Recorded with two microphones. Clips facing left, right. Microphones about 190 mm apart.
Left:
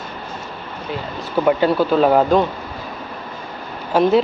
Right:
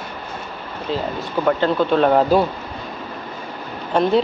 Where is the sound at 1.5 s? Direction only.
10° left (ahead or behind).